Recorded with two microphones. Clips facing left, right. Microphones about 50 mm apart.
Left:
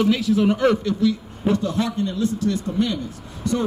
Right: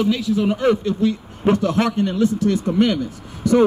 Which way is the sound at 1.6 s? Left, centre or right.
Right.